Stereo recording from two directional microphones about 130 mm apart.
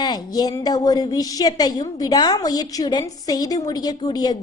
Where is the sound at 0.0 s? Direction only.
30° left (ahead or behind).